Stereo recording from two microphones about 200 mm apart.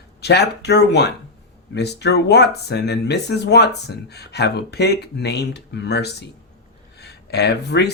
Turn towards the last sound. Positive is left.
turn(degrees=55)  # may be behind; listen again after turning